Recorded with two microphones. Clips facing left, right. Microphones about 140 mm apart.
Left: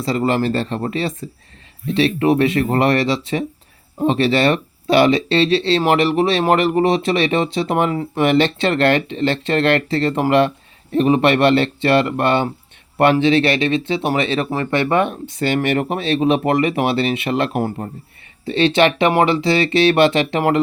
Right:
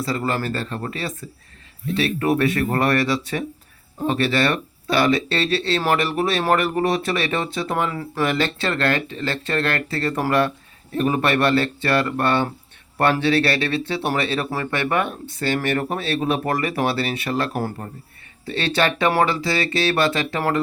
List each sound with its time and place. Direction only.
0.0 s speech: 25° left (ahead or behind)